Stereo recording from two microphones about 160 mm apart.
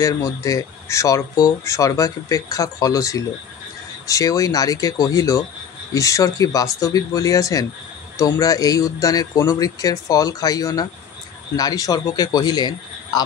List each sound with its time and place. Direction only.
0.0 s speech: 20° left (ahead or behind)